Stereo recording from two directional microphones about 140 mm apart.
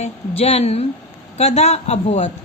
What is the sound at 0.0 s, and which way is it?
A man's voice, 45° left (ahead or behind).